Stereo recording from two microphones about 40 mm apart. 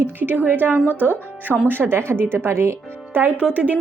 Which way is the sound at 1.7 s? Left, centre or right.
Right.